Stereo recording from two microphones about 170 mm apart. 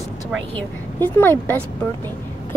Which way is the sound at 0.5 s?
10° left (ahead or behind).